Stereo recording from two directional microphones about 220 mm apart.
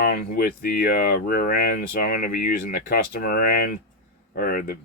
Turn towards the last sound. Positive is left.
turn(degrees=40)  # may be behind; listen again after turning